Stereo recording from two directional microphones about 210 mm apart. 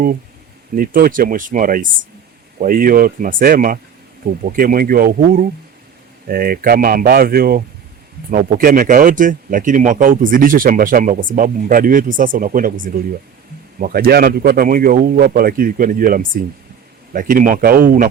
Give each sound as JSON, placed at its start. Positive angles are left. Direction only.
{"t": 0.8, "sound": "a man's voice", "side_deg": -40}